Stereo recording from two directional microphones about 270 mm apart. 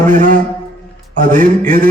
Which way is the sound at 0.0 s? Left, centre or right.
Right.